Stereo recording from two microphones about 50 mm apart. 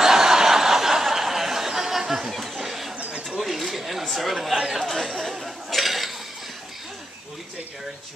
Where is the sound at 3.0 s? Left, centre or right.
Right.